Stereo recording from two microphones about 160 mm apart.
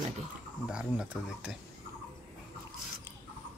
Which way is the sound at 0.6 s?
5° right (ahead or behind).